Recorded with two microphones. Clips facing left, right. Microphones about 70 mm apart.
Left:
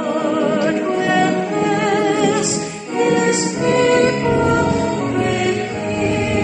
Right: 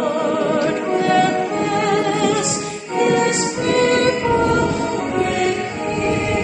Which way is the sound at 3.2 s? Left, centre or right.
Centre.